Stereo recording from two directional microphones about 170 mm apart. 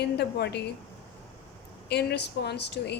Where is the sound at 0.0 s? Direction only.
75° left (ahead or behind).